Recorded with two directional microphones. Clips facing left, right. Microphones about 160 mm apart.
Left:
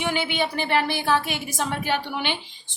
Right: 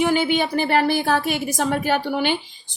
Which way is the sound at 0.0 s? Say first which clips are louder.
Right 6 dB; 40° right (ahead or behind).